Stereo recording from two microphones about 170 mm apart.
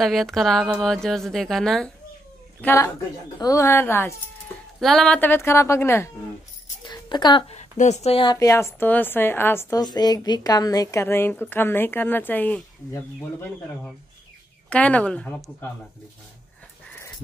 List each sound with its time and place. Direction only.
0.0 s a woman's voice: centre (ahead or behind)
2.6 s a woman's voice: 15° left (ahead or behind)
4.7 s a woman's voice: centre (ahead or behind)
6.9 s a woman's voice: 25° left (ahead or behind)
7.5 s a woman's voice: 45° left (ahead or behind); by 13.5 s 10° left (ahead or behind)
14.7 s a woman's voice: 10° left (ahead or behind)